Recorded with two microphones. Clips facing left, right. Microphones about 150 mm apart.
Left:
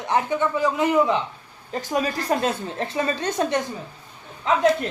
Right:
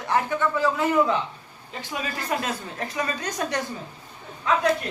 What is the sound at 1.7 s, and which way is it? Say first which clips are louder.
A woman's voice: left 8 dB; 45° left (ahead or behind).